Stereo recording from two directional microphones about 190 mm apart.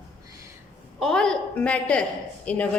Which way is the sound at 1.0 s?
Centre (ahead or behind).